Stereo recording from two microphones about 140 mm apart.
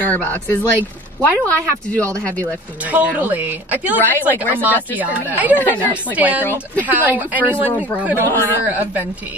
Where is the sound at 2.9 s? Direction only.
10° right (ahead or behind).